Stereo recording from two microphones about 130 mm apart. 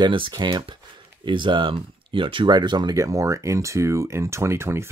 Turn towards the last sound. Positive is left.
turn(degrees=-20)  # may be behind; listen again after turning